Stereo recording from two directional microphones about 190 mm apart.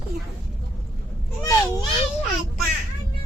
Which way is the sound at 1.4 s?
15° left (ahead or behind).